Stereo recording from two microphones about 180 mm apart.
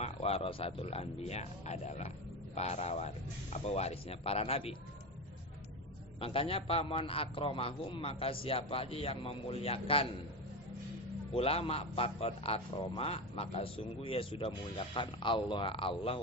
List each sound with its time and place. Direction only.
0.0 s a man's voice: 35° left (ahead or behind)
6.1 s a man's voice: 30° left (ahead or behind)
11.3 s a man's voice: 30° left (ahead or behind)